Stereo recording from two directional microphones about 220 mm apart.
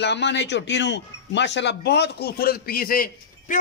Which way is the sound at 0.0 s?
50° left (ahead or behind).